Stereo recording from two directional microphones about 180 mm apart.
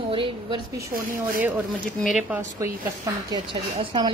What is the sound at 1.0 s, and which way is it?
Speech, 50° right (ahead or behind).